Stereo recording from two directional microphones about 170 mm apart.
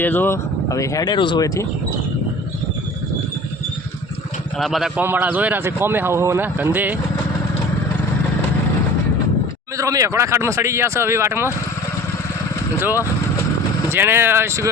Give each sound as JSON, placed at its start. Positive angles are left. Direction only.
{"t": 0.0, "sound": "speech", "side_deg": 10}
{"t": 4.5, "sound": "a man's voice", "side_deg": 0}
{"t": 9.7, "sound": "a man's voice", "side_deg": -20}
{"t": 13.9, "sound": "a man's voice", "side_deg": -15}